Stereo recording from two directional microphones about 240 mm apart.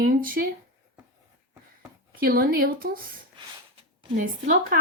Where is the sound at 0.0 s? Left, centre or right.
Right.